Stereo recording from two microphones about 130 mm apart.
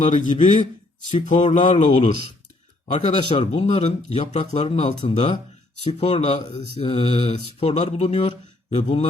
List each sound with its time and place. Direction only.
0.1 s a man's voice: 70° left (ahead or behind)
3.2 s speech: 40° left (ahead or behind)
3.4 s a man's voice: 55° left (ahead or behind)